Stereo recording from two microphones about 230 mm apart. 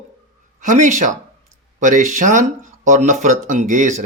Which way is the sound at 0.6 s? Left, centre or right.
Right.